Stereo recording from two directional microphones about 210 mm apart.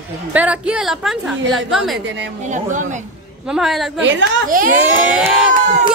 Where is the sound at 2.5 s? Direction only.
35° right (ahead or behind).